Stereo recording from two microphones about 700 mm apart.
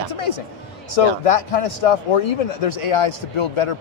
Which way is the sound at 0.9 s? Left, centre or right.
Left.